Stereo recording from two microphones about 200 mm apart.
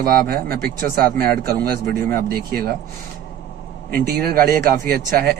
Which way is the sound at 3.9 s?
50° right (ahead or behind).